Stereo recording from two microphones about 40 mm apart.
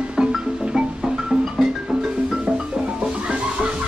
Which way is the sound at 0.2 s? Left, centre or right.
Centre.